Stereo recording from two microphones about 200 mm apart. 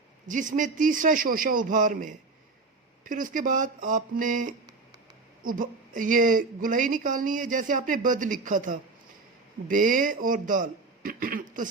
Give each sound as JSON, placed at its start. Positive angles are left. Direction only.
{"t": 0.3, "sound": "a woman's voice", "side_deg": -40}